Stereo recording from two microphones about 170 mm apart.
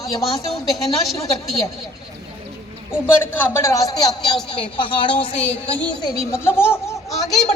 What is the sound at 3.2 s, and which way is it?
A man's voice, 10° left (ahead or behind).